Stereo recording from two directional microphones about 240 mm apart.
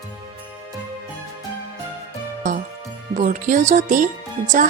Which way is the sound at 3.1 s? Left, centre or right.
Right.